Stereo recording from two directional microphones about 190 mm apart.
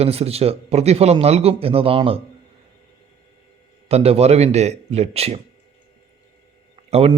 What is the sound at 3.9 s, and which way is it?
Speech, 30° right (ahead or behind).